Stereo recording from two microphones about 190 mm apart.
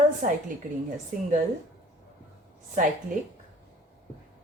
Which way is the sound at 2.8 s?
45° right (ahead or behind).